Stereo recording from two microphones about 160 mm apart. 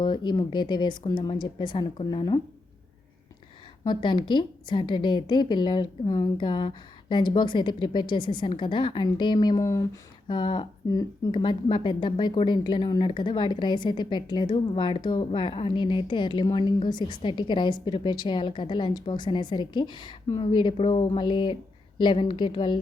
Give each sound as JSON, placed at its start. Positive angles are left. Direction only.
{"t": 0.0, "sound": "speech", "side_deg": 30}
{"t": 3.8, "sound": "speech", "side_deg": 30}